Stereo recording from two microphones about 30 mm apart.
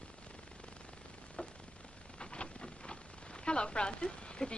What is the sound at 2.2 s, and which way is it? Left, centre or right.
Rain, left.